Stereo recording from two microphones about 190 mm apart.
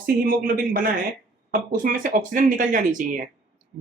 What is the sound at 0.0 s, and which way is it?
Speech, 50° right (ahead or behind).